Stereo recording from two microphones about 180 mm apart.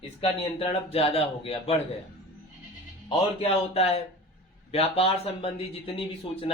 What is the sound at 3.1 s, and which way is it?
Speech, 30° left (ahead or behind).